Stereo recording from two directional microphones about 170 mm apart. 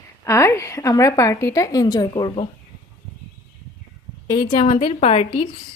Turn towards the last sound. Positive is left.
turn(degrees=35)  # may be behind; listen again after turning